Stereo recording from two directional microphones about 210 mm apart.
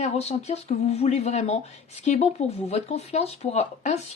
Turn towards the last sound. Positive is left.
turn(degrees=30)  # may be behind; listen again after turning